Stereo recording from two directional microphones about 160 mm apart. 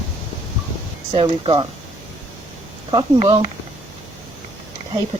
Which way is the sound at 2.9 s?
35° right (ahead or behind).